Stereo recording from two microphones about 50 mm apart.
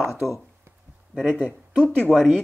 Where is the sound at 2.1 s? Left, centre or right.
Centre.